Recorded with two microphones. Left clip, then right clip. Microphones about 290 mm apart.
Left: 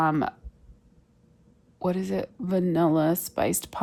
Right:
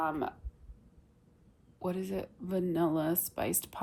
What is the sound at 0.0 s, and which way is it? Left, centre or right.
Speech, left.